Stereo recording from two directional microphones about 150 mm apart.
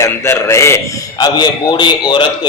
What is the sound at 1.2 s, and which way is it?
A man's voice, 30° left (ahead or behind).